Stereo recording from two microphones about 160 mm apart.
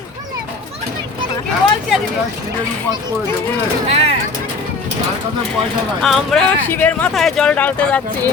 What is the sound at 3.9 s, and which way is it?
Speech, 40° right (ahead or behind).